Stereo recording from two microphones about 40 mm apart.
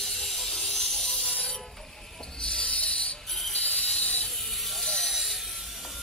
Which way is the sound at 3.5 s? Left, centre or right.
Left.